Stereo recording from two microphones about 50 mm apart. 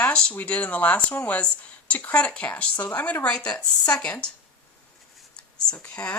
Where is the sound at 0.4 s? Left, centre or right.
Left.